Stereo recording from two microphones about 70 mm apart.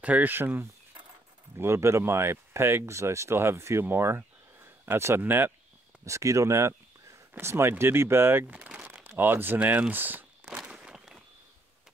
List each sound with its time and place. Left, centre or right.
0.0 s speech: right
1.6 s speech: right
6.0 s speech: right
8.5 s speech: centre
9.2 s speech: right
10.5 s walk: centre